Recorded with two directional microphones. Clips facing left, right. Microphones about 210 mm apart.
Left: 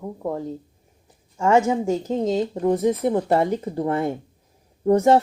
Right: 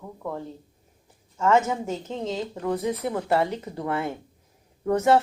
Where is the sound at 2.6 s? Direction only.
20° left (ahead or behind).